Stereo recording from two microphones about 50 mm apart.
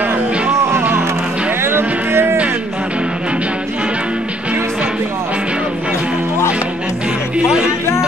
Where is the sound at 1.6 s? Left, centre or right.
Right.